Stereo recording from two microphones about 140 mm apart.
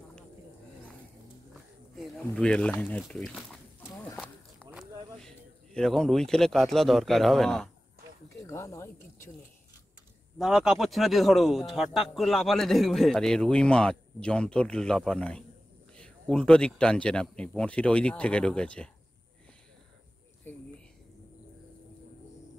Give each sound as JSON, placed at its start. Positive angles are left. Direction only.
{"t": 1.5, "sound": "a sound", "side_deg": 0}
{"t": 3.0, "sound": "speech", "side_deg": 5}
{"t": 5.2, "sound": "a man's voice", "side_deg": 5}
{"t": 8.5, "sound": "speech", "side_deg": 20}
{"t": 10.4, "sound": "speech", "side_deg": 0}
{"t": 20.5, "sound": "a sound", "side_deg": 15}